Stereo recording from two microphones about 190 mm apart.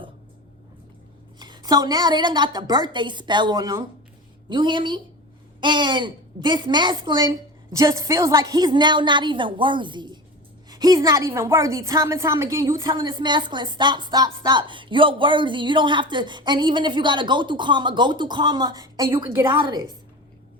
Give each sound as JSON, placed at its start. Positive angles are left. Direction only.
{"t": 1.4, "sound": "a woman's voice", "side_deg": -25}
{"t": 19.5, "sound": "a woman's voice", "side_deg": -25}